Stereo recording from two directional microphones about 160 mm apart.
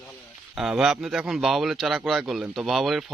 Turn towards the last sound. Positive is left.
turn(degrees=0)  # may be behind; listen again after turning